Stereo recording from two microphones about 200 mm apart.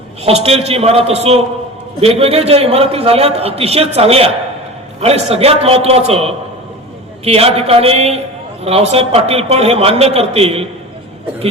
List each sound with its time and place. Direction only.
0.3 s a man's voice: 30° right (ahead or behind)